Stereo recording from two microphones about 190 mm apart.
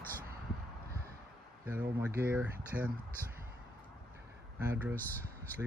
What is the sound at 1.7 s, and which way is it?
Speech, 10° right (ahead or behind).